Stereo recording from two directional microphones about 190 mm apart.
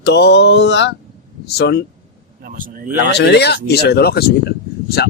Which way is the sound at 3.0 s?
60° left (ahead or behind).